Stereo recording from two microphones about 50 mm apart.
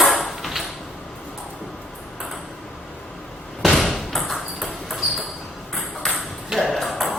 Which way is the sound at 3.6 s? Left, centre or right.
Centre.